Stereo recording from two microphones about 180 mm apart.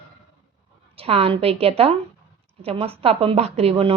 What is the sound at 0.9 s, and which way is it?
A woman's voice, 30° right (ahead or behind).